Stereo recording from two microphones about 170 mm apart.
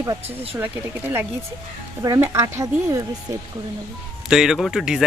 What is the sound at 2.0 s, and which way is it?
Speech, 15° right (ahead or behind).